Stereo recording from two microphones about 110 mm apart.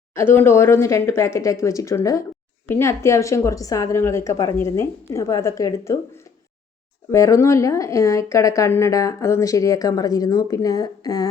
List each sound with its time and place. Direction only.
0.1 s a woman's voice: 20° left (ahead or behind)
7.1 s a woman's voice: 25° left (ahead or behind)